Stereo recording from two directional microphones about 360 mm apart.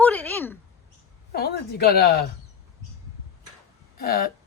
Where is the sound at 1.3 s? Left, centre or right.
Left.